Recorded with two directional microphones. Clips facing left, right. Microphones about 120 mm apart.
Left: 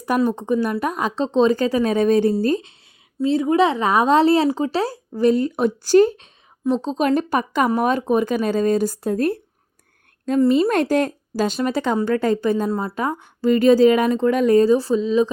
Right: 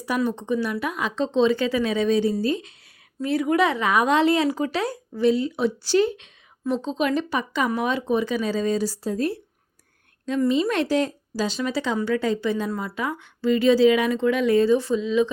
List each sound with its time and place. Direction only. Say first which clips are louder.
0.3 s speech: left 4 dB; 45° left (ahead or behind)
3.2 s a woman's voice: left 4 dB; 25° left (ahead or behind); by 9.4 s 55° left (ahead or behind)
10.2 s speech: left 5 dB; 45° left (ahead or behind)